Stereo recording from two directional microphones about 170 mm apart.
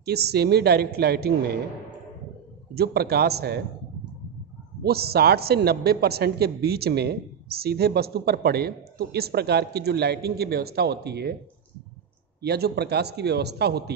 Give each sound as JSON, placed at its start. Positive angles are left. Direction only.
{"t": 0.0, "sound": "a woman's voice", "side_deg": -70}
{"t": 2.7, "sound": "a woman's voice", "side_deg": -65}
{"t": 4.8, "sound": "a woman's voice", "side_deg": -65}
{"t": 12.4, "sound": "a woman's voice", "side_deg": -70}